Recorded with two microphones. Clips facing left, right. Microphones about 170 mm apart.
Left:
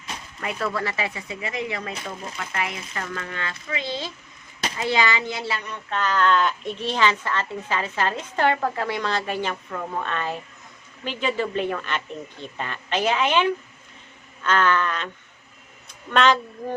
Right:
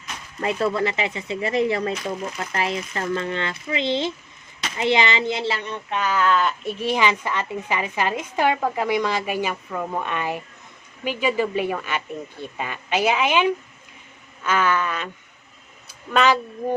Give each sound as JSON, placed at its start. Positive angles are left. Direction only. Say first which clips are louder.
{"t": 0.3, "sound": "speech", "louder": "right 6 dB", "side_deg": -30}
{"t": 1.4, "sound": "speech", "louder": "right 9 dB", "side_deg": -35}
{"t": 5.9, "sound": "speech", "louder": "even", "side_deg": -10}